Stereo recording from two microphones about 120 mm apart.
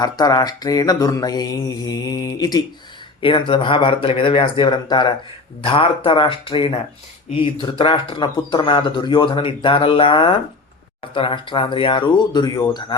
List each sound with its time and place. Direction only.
0.0 s mantra: 35° left (ahead or behind)
3.2 s speech: 45° left (ahead or behind)